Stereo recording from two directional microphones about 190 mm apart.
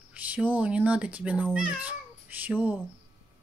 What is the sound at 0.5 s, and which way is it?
A child's voice, 5° right (ahead or behind).